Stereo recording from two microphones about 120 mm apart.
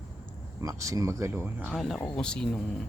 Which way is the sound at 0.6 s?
25° right (ahead or behind).